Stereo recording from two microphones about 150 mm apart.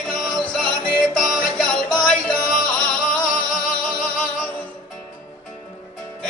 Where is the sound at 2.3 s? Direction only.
70° left (ahead or behind).